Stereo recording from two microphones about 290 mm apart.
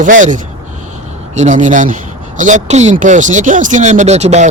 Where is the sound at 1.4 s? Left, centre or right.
Right.